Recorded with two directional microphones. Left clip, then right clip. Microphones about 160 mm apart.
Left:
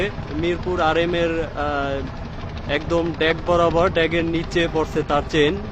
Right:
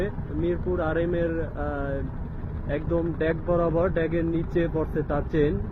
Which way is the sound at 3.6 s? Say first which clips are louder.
Left 7 dB; 25° left (ahead or behind).